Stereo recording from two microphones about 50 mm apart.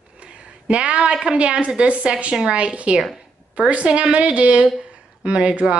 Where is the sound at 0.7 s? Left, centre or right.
Right.